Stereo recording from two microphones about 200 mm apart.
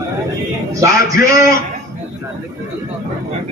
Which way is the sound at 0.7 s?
15° right (ahead or behind).